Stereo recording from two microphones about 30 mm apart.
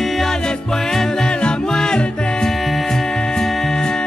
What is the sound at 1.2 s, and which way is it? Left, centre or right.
Music, left.